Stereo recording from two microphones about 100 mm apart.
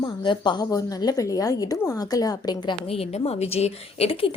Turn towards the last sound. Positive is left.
turn(degrees=80)